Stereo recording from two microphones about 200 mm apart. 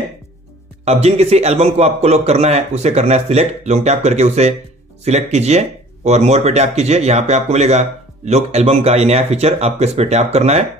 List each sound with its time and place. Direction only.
0.8 s a man's voice: 35° right (ahead or behind)